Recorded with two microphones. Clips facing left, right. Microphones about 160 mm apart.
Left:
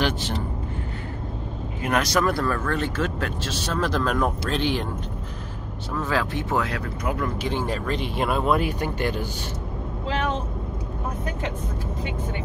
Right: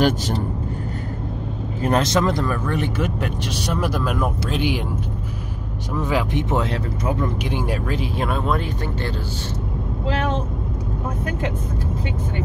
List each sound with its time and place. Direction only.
0.0 s vehicle: 40° right (ahead or behind)
1.8 s speech: 30° right (ahead or behind); by 4.8 s 10° right (ahead or behind)
5.9 s speech: 15° right (ahead or behind)
7.4 s speech: 10° right (ahead or behind); by 9.1 s 10° left (ahead or behind)